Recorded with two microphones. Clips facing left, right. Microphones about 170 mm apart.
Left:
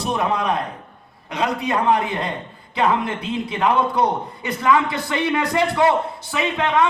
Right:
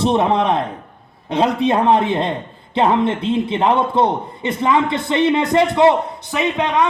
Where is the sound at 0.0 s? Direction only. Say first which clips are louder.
Right 6 dB; 25° right (ahead or behind).